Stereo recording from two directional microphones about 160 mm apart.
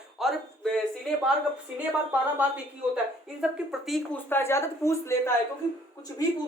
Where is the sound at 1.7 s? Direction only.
10° right (ahead or behind).